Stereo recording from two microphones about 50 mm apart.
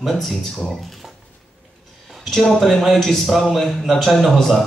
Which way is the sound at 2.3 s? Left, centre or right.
Centre.